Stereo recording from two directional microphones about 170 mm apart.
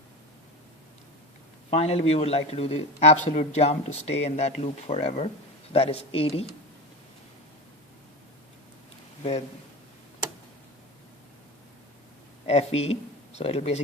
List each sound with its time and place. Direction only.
1.7 s a man's voice: 35° left (ahead or behind)
12.5 s a man's voice: 40° left (ahead or behind)